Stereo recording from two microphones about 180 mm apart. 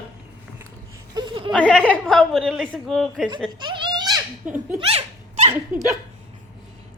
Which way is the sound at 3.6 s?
25° right (ahead or behind).